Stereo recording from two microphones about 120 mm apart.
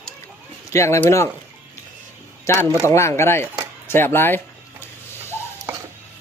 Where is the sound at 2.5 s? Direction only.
25° left (ahead or behind).